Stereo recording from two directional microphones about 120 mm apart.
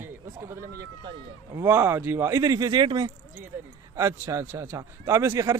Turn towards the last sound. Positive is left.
turn(degrees=-25)  # may be behind; listen again after turning